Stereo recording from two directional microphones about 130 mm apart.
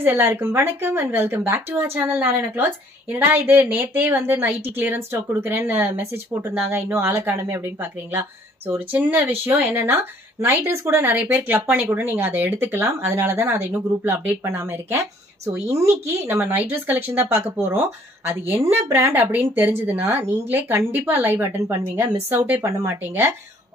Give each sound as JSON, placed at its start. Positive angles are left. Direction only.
{"t": 0.0, "sound": "speech", "side_deg": -15}
{"t": 10.4, "sound": "speech", "side_deg": -20}